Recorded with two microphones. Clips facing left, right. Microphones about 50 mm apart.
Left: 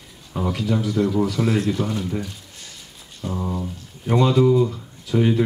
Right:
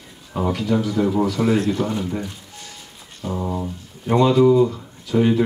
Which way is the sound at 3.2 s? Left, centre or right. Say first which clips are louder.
Right 2 dB; centre.